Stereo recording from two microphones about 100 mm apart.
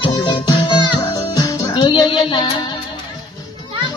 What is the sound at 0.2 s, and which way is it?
Music, 55° left (ahead or behind).